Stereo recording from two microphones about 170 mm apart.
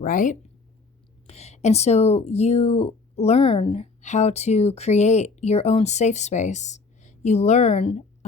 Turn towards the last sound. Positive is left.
turn(degrees=40)  # may be behind; listen again after turning